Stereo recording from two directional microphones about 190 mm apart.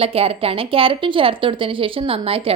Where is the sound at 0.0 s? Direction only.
30° right (ahead or behind).